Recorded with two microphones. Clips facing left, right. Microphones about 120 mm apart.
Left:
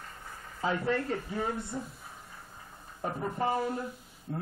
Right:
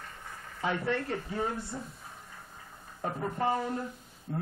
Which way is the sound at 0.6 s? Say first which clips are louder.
Left 1 dB; 35° left (ahead or behind).